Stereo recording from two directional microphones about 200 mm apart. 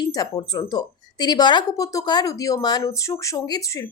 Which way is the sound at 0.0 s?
20° left (ahead or behind).